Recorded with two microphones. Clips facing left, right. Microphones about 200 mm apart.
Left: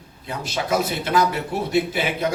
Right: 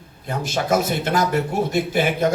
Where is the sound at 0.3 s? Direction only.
45° right (ahead or behind).